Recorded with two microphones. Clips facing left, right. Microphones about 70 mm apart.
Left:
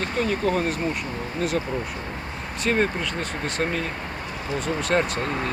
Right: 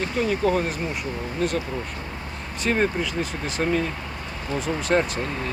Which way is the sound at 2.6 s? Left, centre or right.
Centre.